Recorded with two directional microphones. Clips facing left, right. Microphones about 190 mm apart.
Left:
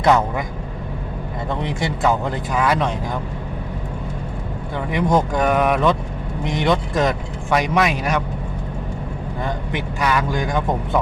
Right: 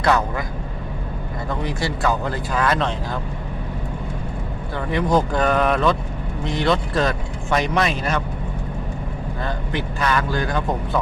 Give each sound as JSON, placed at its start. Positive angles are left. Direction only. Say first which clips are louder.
{"t": 0.0, "sound": "a man's voice", "louder": "left 3 dB", "side_deg": 20}
{"t": 1.5, "sound": "speech", "louder": "left 1 dB", "side_deg": 20}
{"t": 4.9, "sound": "speech", "louder": "left 1 dB", "side_deg": 15}
{"t": 9.7, "sound": "speech", "louder": "left 1 dB", "side_deg": 10}